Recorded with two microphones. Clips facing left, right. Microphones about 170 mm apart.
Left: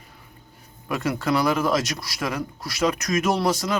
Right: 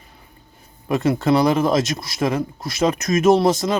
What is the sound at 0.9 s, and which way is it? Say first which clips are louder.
Speech: right 6 dB; 25° right (ahead or behind).